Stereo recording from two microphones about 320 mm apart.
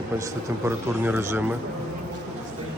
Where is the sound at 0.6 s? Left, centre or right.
Centre.